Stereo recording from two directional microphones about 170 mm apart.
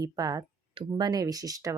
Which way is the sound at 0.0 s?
20° right (ahead or behind).